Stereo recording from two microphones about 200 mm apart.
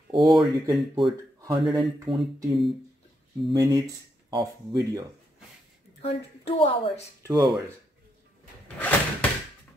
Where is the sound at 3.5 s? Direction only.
20° right (ahead or behind).